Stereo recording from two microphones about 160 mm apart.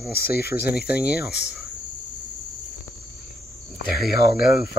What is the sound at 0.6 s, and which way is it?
Speech, 85° left.